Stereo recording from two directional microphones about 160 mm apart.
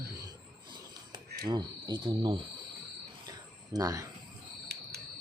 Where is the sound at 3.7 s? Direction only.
20° right (ahead or behind).